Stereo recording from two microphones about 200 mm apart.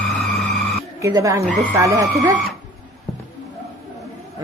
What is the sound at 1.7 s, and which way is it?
Speech, 15° right (ahead or behind).